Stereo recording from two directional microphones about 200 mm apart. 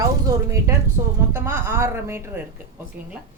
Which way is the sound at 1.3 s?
10° right (ahead or behind).